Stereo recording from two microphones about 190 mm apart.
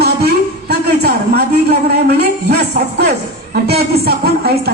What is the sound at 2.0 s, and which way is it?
A woman's voice, 60° right (ahead or behind).